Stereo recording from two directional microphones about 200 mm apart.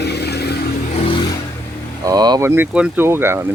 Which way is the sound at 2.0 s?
20° right (ahead or behind).